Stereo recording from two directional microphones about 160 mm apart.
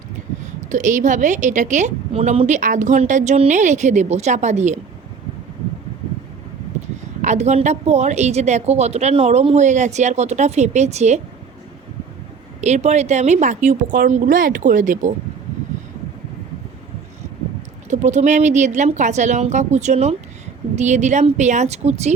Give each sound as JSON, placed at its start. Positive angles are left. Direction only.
{"t": 0.7, "sound": "a woman's voice", "side_deg": -50}
{"t": 7.2, "sound": "a woman's voice", "side_deg": -45}
{"t": 12.6, "sound": "a woman's voice", "side_deg": -45}
{"t": 17.8, "sound": "a woman's voice", "side_deg": -45}